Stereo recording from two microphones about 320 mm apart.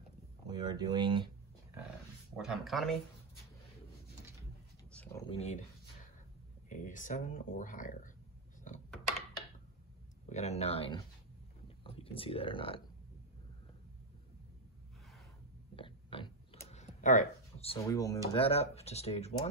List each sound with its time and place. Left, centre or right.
0.5 s speech: centre
2.4 s speech: centre
4.9 s a sound: centre
5.3 s speech: centre
6.7 s speech: left
10.3 s speech: centre
15.7 s typing: centre
18.3 s speech: centre